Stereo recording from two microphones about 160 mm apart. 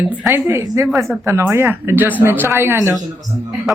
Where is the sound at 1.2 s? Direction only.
15° right (ahead or behind).